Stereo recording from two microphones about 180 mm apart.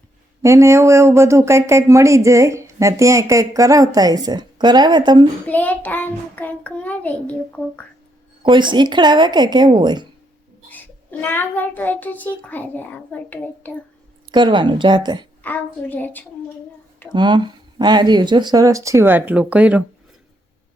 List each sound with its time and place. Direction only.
0.4 s speech: 15° right (ahead or behind)
5.5 s a child's voice: 10° left (ahead or behind)
8.4 s speech: 25° right (ahead or behind)
10.7 s a child's voice: 10° left (ahead or behind)
14.3 s speech: 25° right (ahead or behind)
15.4 s a child's voice: 10° left (ahead or behind)
17.2 s speech: 25° right (ahead or behind); by 19.8 s 5° right (ahead or behind)